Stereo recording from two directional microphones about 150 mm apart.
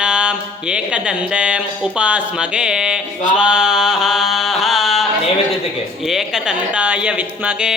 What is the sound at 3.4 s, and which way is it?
Music, 5° right (ahead or behind).